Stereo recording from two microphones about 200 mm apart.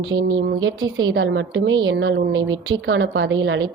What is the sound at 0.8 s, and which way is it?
Speech, 20° right (ahead or behind).